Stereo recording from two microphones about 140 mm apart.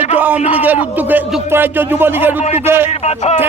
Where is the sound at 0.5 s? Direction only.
10° right (ahead or behind).